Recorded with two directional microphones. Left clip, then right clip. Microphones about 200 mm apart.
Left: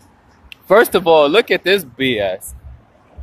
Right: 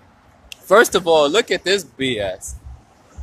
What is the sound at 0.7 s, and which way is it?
Speech, 25° left (ahead or behind).